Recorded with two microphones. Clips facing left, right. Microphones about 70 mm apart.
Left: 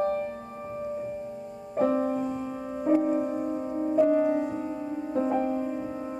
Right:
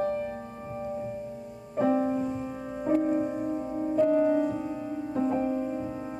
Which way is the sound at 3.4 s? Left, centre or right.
Centre.